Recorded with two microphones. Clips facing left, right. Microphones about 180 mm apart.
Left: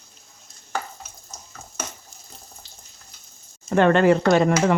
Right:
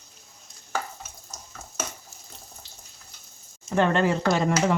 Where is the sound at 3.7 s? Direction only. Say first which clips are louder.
Left 6 dB; 65° left (ahead or behind).